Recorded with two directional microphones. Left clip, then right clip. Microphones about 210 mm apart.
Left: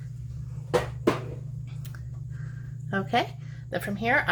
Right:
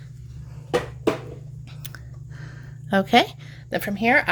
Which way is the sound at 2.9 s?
45° right (ahead or behind).